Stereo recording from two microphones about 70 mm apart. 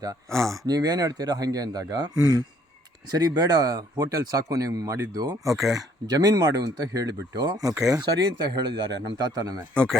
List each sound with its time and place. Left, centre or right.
0.3 s speech: centre
0.6 s speech: right
3.1 s speech: right
5.5 s speech: centre
6.1 s speech: right
9.2 s speech: right
9.7 s speech: centre